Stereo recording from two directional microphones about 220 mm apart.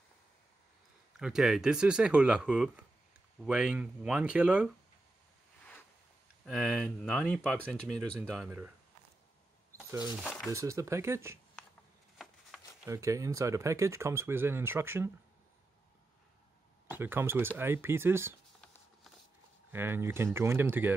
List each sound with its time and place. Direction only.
1.1 s speech: centre (ahead or behind)
6.4 s speech: centre (ahead or behind)
10.2 s speech: centre (ahead or behind)
10.5 s speech: 15° right (ahead or behind)
12.2 s a sound: centre (ahead or behind)
12.9 s speech: 15° right (ahead or behind)
16.9 s speech: 10° right (ahead or behind)
19.7 s speech: 10° right (ahead or behind)